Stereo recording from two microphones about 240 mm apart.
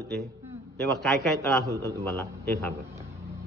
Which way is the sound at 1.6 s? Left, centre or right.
Centre.